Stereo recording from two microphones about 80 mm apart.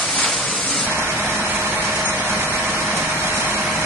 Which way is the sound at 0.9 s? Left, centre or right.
Right.